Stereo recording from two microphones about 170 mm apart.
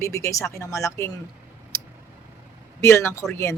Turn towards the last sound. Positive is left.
turn(degrees=15)  # may be behind; listen again after turning